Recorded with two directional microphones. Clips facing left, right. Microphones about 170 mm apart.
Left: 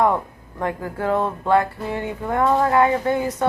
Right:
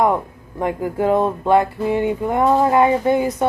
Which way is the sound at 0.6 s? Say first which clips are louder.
Right 5 dB; 15° right (ahead or behind).